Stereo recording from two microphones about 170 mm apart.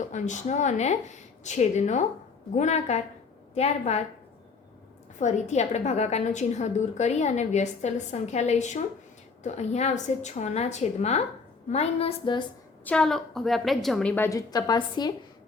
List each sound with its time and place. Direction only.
0.1 s a woman's voice: 45° left (ahead or behind)
5.2 s a woman's voice: 40° left (ahead or behind)
12.8 s a woman's voice: 5° left (ahead or behind)
14.3 s a woman's voice: 20° left (ahead or behind)